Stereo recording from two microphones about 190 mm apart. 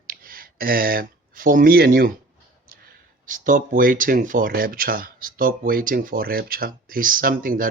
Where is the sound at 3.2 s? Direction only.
45° right (ahead or behind).